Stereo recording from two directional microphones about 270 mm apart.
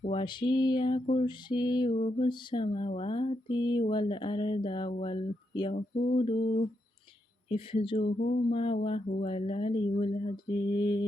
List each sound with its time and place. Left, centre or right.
0.0 s mantra: centre
7.5 s mantra: centre